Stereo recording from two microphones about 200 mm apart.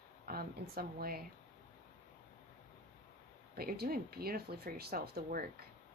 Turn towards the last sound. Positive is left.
turn(degrees=-45)  # may be behind; listen again after turning